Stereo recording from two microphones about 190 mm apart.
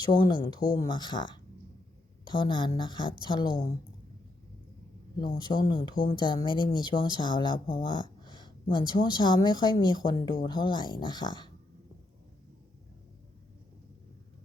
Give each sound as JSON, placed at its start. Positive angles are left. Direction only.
{"t": 0.1, "sound": "speech", "side_deg": 25}
{"t": 5.4, "sound": "speech", "side_deg": 25}